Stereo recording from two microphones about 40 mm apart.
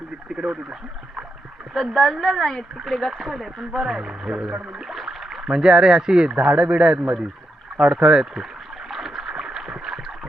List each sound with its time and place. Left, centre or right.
0.3 s speech: right
1.7 s speech: centre
4.9 s a sound: centre
5.5 s speech: centre
8.9 s rowboat: centre